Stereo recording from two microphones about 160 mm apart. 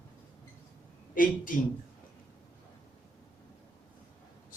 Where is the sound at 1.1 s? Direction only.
60° left (ahead or behind).